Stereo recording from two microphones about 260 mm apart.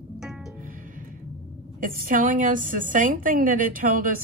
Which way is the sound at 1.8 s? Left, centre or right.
Right.